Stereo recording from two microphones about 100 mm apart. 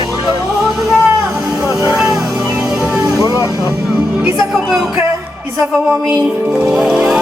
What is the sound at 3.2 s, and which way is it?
Vehicle, 35° right (ahead or behind).